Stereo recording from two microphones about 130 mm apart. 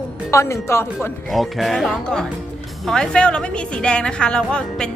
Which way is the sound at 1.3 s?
Centre (ahead or behind).